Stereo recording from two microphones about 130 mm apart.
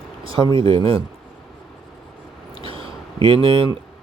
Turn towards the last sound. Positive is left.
turn(degrees=-45)  # may be behind; listen again after turning